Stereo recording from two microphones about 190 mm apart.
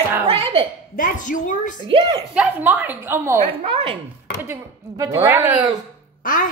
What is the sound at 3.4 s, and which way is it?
Speech, 30° right (ahead or behind).